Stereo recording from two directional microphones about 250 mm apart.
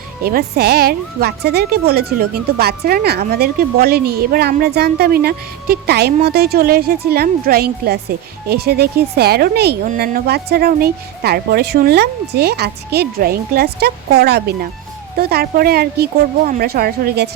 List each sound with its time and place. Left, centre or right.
0.3 s a woman's voice: right